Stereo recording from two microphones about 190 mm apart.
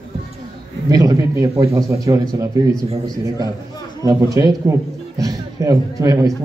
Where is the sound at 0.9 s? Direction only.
20° right (ahead or behind).